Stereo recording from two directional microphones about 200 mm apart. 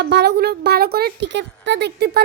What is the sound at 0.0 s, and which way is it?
Speech, 55° right (ahead or behind).